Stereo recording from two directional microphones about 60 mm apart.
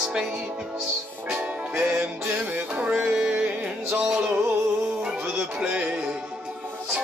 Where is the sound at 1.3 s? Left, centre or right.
Centre.